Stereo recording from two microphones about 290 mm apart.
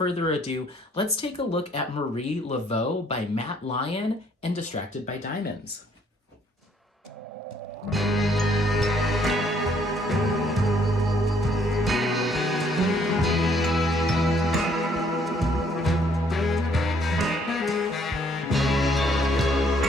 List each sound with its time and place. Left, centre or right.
0.0 s speech: left
7.9 s music: centre